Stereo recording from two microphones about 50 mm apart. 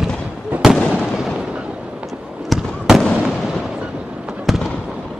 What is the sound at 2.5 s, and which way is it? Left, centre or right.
Fireworks, centre.